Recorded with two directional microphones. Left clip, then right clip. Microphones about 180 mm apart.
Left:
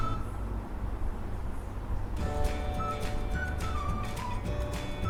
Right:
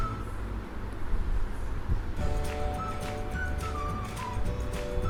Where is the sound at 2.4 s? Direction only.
Centre (ahead or behind).